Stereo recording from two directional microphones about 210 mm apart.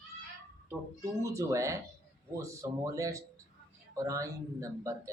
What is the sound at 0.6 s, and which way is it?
A woman's voice, 15° right (ahead or behind).